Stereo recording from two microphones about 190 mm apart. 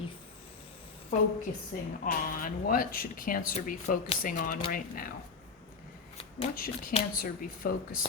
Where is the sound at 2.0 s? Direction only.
45° left (ahead or behind).